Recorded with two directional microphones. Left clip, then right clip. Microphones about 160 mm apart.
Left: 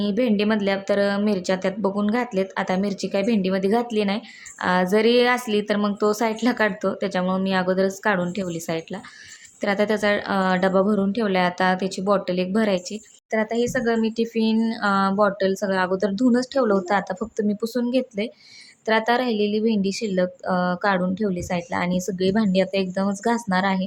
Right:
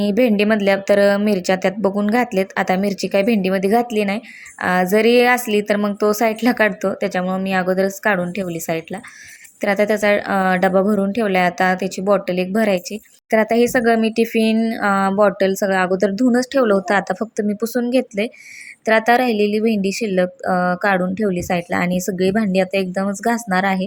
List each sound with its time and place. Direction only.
0.0 s a woman's voice: 25° right (ahead or behind)
13.3 s a woman's voice: 25° right (ahead or behind)